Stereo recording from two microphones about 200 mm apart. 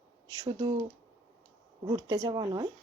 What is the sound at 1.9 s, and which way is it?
Speech, 20° right (ahead or behind).